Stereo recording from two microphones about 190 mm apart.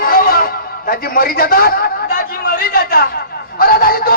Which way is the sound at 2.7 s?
50° left (ahead or behind).